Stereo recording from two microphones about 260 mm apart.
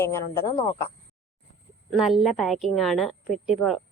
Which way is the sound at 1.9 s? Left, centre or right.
Centre.